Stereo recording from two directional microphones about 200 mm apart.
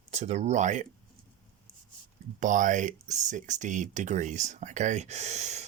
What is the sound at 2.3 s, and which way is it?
Speech, 40° right (ahead or behind).